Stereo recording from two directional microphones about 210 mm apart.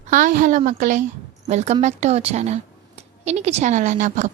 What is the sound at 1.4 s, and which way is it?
A woman's voice, 35° right (ahead or behind).